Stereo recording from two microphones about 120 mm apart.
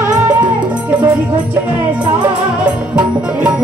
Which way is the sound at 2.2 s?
10° right (ahead or behind).